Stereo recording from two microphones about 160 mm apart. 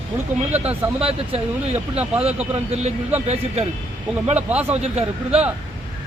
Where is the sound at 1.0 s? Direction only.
35° right (ahead or behind).